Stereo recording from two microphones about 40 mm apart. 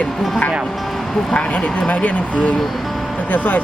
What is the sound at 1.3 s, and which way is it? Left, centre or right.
Speech, left.